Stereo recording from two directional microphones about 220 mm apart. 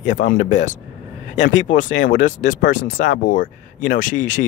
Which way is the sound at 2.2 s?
35° left (ahead or behind).